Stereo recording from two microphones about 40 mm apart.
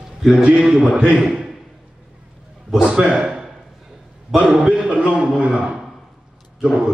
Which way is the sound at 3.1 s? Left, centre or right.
Right.